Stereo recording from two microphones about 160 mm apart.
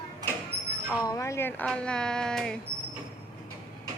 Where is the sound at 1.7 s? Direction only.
5° left (ahead or behind).